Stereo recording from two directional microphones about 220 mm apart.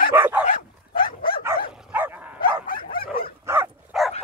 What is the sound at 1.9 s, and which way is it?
Dog, 10° right (ahead or behind).